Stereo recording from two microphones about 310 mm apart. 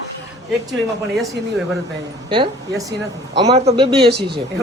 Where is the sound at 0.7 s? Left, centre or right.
Centre.